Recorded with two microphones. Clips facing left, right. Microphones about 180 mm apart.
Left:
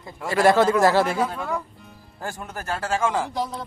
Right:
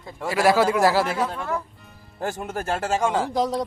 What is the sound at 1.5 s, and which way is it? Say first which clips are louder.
Music: even; centre (ahead or behind).